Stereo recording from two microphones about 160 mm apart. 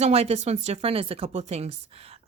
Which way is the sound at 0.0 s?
40° right (ahead or behind).